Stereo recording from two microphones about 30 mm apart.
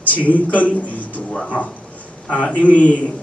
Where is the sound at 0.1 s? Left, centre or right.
Left.